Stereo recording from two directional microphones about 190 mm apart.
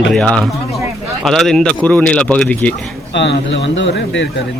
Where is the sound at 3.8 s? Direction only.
70° left (ahead or behind).